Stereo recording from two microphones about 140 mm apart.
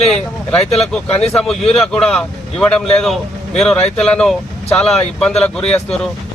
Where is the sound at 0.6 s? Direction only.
45° left (ahead or behind).